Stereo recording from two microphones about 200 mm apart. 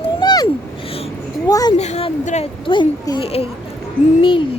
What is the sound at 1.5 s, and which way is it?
Speech, 20° left (ahead or behind).